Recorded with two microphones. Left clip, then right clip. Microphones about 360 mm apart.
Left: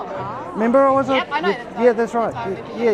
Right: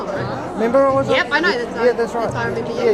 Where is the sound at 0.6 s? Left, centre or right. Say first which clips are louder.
Even; left.